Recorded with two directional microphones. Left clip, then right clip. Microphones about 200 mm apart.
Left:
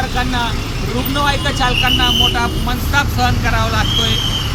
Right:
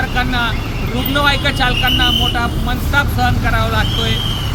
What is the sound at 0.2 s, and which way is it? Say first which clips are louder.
Speech: right 2 dB; 15° right (ahead or behind).